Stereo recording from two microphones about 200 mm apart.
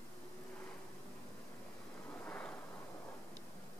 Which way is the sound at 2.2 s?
10° left (ahead or behind).